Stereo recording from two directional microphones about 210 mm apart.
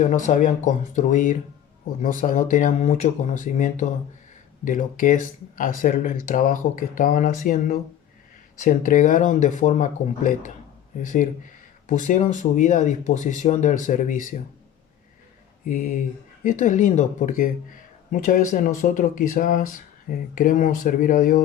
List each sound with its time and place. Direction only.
0.0 s speech: 35° left (ahead or behind)
15.6 s speech: 40° left (ahead or behind)